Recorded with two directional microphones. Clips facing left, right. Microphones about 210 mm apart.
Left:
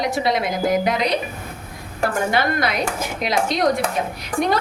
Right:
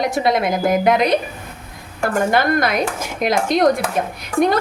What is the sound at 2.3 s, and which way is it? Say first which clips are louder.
A woman's voice: right 4 dB; 50° right (ahead or behind).